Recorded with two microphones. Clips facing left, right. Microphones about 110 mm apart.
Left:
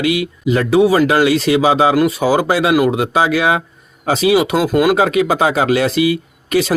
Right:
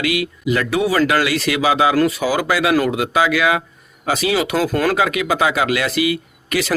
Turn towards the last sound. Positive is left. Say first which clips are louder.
# left 5 dB
turn(degrees=25)  # may be behind; listen again after turning